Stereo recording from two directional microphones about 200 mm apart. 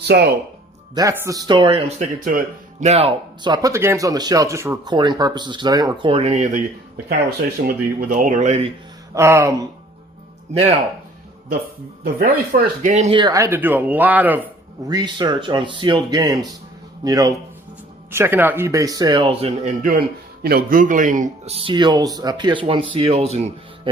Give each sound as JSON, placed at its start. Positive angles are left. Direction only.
{"t": 0.0, "sound": "speech", "side_deg": -55}
{"t": 0.9, "sound": "speech", "side_deg": -15}
{"t": 7.1, "sound": "speech", "side_deg": -50}
{"t": 9.1, "sound": "speech", "side_deg": -15}
{"t": 10.5, "sound": "speech", "side_deg": -30}
{"t": 12.0, "sound": "speech", "side_deg": -45}
{"t": 14.9, "sound": "speech", "side_deg": -20}
{"t": 19.8, "sound": "speech", "side_deg": -45}